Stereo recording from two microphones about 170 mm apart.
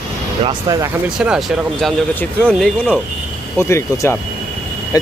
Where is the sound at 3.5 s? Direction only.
15° left (ahead or behind).